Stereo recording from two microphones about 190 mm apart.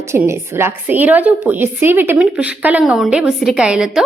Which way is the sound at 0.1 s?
15° right (ahead or behind).